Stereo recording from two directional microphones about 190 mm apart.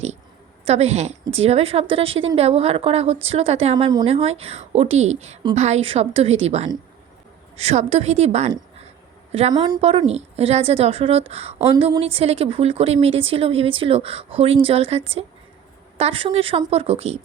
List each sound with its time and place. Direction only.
0.6 s a woman's voice: 35° right (ahead or behind)